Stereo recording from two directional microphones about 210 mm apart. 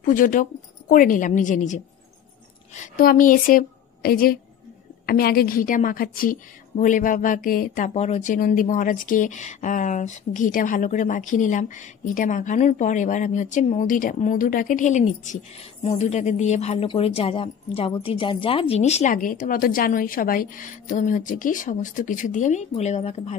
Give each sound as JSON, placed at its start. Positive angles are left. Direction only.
{"t": 0.0, "sound": "a woman's voice", "side_deg": 40}